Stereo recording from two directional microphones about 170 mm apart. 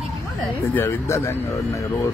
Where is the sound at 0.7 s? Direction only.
15° left (ahead or behind).